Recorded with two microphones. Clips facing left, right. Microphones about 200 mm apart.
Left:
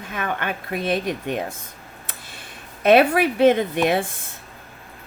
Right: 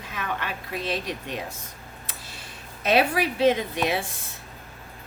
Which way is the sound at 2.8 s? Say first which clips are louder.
Left 7 dB; 55° left (ahead or behind).